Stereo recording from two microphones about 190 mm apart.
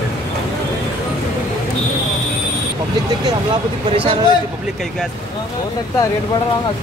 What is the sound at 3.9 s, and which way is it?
Speech, 30° right (ahead or behind).